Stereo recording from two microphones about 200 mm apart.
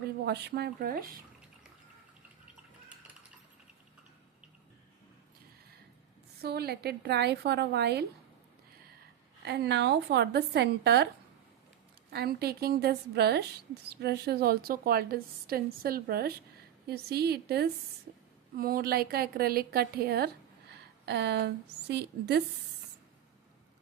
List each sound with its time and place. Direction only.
0.3 s a woman's voice: 55° right (ahead or behind)
6.4 s a woman's voice: 50° right (ahead or behind)
9.4 s a woman's voice: 55° right (ahead or behind)
12.1 s a woman's voice: 50° right (ahead or behind)